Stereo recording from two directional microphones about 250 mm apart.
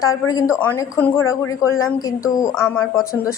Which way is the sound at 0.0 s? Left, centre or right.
Centre.